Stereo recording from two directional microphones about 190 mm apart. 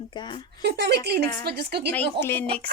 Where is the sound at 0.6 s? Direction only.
60° right (ahead or behind).